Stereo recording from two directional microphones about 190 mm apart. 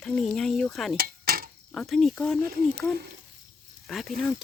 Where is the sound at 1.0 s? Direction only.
50° right (ahead or behind).